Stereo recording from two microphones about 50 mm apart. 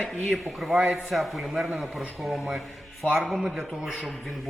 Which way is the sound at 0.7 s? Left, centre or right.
Right.